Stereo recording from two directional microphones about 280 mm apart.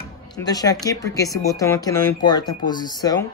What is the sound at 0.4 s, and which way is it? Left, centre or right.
Speech, centre.